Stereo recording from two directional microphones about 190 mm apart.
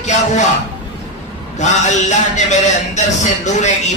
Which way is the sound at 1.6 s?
40° left (ahead or behind).